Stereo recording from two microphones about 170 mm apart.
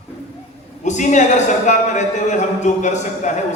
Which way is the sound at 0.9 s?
45° left (ahead or behind).